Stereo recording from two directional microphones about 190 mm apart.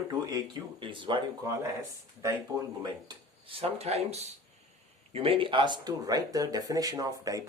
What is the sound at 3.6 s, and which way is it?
Speech, 30° right (ahead or behind).